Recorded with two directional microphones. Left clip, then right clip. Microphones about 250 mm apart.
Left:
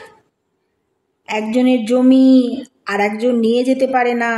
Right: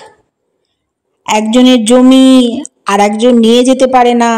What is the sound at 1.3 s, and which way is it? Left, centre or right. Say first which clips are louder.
Speech: right 8 dB; right.